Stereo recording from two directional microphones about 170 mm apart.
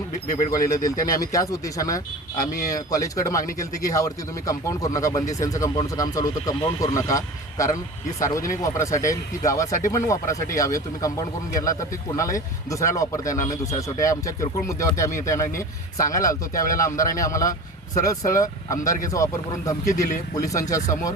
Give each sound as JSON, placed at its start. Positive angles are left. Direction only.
{"t": 0.3, "sound": "speech", "side_deg": 50}
{"t": 0.9, "sound": "speech", "side_deg": 20}